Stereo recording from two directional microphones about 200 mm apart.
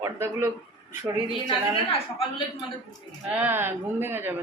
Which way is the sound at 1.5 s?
25° left (ahead or behind).